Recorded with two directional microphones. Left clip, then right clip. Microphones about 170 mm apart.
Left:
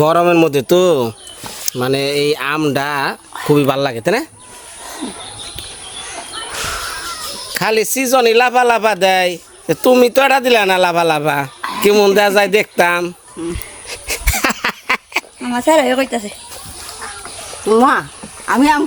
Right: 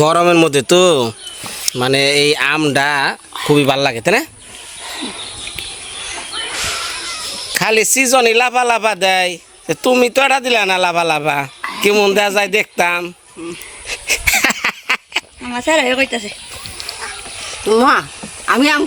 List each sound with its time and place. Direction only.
0.0 s a man's voice: 5° left (ahead or behind)
7.5 s a man's voice: centre (ahead or behind)
13.8 s a sound: centre (ahead or behind)
15.4 s speech: 75° left (ahead or behind)
17.7 s speech: 40° left (ahead or behind)